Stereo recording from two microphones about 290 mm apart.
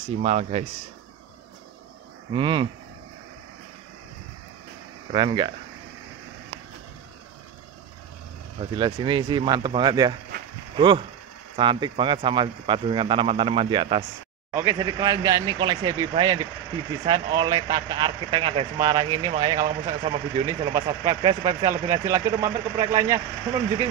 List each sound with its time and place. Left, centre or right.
0.1 s speech: right
2.3 s speech: centre
5.1 s speech: centre
8.5 s speech: centre